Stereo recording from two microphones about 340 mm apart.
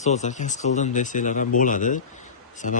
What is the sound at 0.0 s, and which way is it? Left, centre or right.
A man's voice, centre.